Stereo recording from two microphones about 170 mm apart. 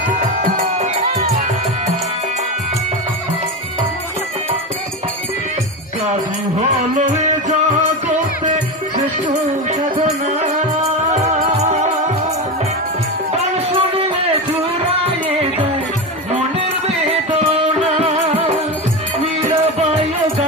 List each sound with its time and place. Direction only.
0.7 s music: 40° right (ahead or behind)
6.6 s music: 45° right (ahead or behind)
9.7 s music: 40° right (ahead or behind)
13.4 s music: 30° right (ahead or behind)
17.1 s music: 35° right (ahead or behind)